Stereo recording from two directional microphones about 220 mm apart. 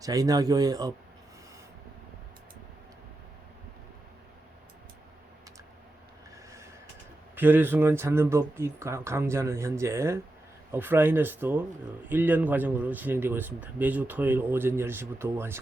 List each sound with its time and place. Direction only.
0.0 s speech: 15° right (ahead or behind)
7.3 s speech: 10° right (ahead or behind)